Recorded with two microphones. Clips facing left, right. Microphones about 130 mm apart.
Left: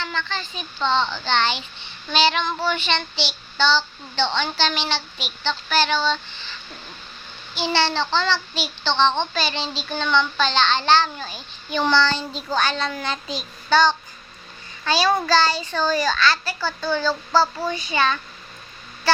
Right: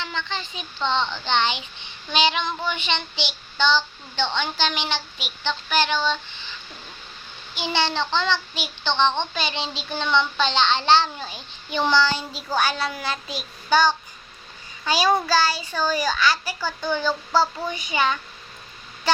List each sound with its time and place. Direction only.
0.0 s a child's voice: 20° right (ahead or behind)
7.5 s a child's voice: 15° right (ahead or behind)
11.9 s a child's voice: 10° right (ahead or behind)
19.1 s a sound: 15° right (ahead or behind)